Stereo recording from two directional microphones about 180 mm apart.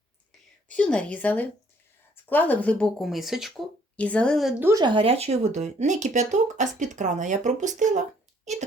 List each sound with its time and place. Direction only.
0.7 s a woman's voice: 5° left (ahead or behind)
4.6 s speech: 20° right (ahead or behind); by 8.0 s 45° right (ahead or behind)